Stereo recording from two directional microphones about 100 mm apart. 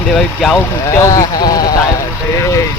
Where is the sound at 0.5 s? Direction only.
30° left (ahead or behind).